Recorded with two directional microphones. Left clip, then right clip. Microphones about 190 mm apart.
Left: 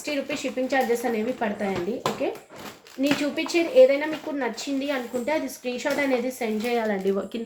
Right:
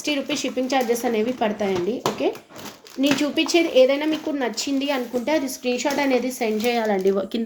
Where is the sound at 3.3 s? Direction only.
45° right (ahead or behind).